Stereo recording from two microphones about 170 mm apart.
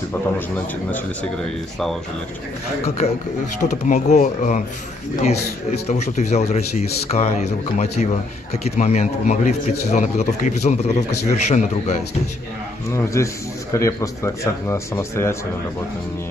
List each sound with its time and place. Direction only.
0.9 s speech: 5° left (ahead or behind)
3.0 s a man's voice: 40° left (ahead or behind)
5.9 s a man's voice: 40° left (ahead or behind)
12.9 s a man's voice: 15° left (ahead or behind)